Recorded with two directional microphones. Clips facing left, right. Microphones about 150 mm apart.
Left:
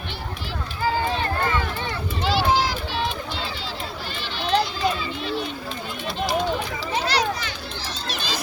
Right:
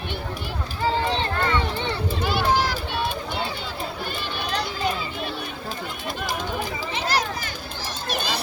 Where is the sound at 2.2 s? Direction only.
55° right (ahead or behind).